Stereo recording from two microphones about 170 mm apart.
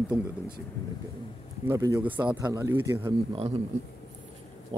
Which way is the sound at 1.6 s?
15° right (ahead or behind).